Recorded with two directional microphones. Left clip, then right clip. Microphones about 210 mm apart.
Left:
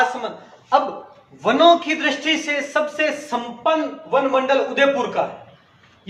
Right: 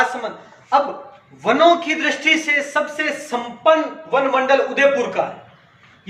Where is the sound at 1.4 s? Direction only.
10° left (ahead or behind).